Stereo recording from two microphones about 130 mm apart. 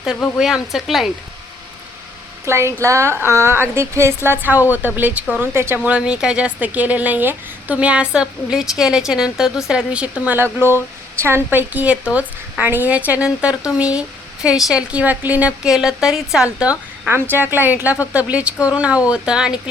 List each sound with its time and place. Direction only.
0.3 s a woman's voice: 5° right (ahead or behind)
2.4 s a woman's voice: 20° right (ahead or behind)
17.1 s a woman's voice: 15° right (ahead or behind)